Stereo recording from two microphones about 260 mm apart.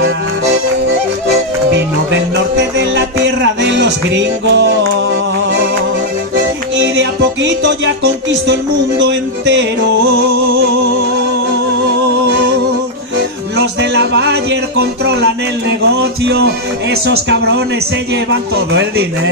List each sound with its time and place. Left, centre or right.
3.6 s music: right
6.8 s music: right
9.0 s music: right
13.6 s music: right
15.9 s speech: right